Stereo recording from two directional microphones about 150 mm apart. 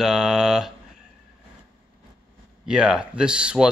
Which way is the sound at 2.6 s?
5° right (ahead or behind).